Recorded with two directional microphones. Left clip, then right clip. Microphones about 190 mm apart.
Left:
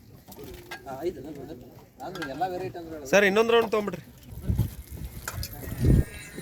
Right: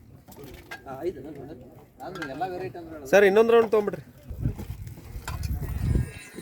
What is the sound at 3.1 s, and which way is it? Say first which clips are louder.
Speech: right 3 dB; 40° right (ahead or behind).